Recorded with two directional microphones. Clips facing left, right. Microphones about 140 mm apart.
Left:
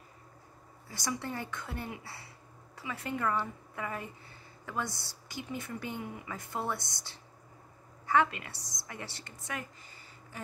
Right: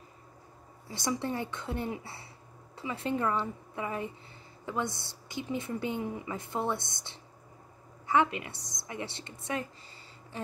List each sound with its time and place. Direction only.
0.8 s a woman's voice: 25° right (ahead or behind)